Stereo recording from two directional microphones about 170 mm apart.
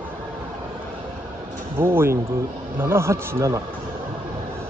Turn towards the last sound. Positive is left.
turn(degrees=-15)  # may be behind; listen again after turning